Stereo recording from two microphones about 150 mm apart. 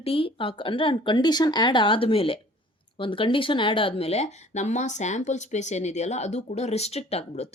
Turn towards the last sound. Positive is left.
turn(degrees=45)  # may be behind; listen again after turning